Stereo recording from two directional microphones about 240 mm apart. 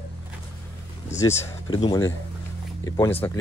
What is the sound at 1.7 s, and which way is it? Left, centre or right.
Speech, centre.